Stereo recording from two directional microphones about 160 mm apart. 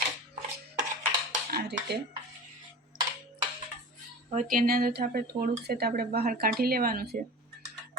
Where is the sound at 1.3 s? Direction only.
75° right (ahead or behind).